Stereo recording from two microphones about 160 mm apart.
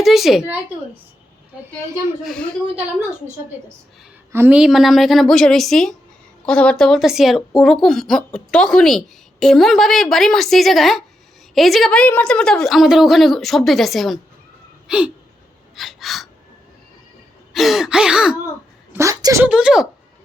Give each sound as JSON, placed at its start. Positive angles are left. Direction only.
{"t": 0.0, "sound": "speech", "side_deg": 0}
{"t": 2.2, "sound": "speech", "side_deg": 5}
{"t": 4.3, "sound": "speech", "side_deg": -10}
{"t": 14.8, "sound": "a sound", "side_deg": -5}
{"t": 15.7, "sound": "gasp", "side_deg": 0}
{"t": 17.5, "sound": "speech", "side_deg": 0}
{"t": 18.9, "sound": "a woman's voice", "side_deg": -20}
{"t": 19.5, "sound": "speech", "side_deg": -5}